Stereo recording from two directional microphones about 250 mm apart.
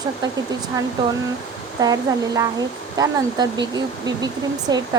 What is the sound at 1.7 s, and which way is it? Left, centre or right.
Speech, centre.